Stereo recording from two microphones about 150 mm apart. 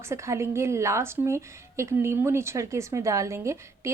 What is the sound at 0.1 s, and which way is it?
A woman's voice, 20° right (ahead or behind).